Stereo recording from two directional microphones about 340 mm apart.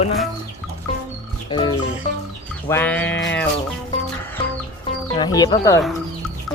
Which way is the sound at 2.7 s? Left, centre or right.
Centre.